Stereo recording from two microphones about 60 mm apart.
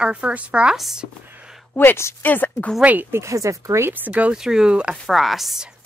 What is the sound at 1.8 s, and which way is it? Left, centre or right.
Speech, left.